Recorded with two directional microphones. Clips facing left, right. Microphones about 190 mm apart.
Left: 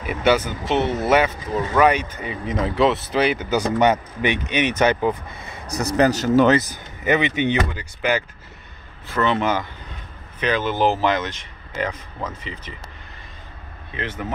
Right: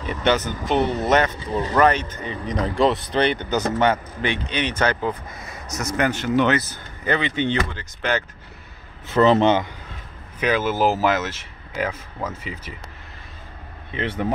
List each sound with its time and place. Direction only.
0.0 s speech: 10° left (ahead or behind); by 6.6 s 40° left (ahead or behind)
6.7 s speech: 15° left (ahead or behind)
9.2 s speech: 30° right (ahead or behind)
10.4 s speech: 5° right (ahead or behind)